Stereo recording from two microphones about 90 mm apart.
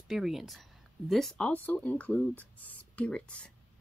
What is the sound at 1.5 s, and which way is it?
A woman's voice, 20° left (ahead or behind).